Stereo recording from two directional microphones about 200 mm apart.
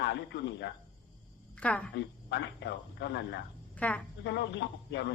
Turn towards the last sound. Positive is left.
turn(degrees=60)  # may be behind; listen again after turning